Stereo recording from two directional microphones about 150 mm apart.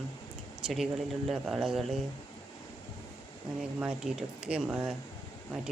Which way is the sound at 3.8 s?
5° right (ahead or behind).